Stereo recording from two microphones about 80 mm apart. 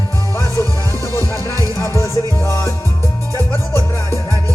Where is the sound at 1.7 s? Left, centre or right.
Left.